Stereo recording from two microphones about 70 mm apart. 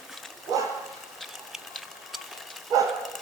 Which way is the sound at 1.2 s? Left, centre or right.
Centre.